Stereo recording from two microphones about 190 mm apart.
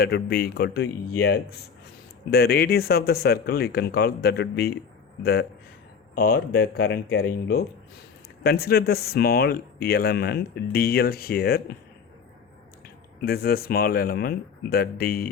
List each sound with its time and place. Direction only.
0.0 s speech: 55° left (ahead or behind)
13.2 s speech: 55° left (ahead or behind)